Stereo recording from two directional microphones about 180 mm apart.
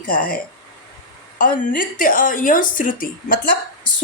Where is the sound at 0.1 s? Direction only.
50° left (ahead or behind).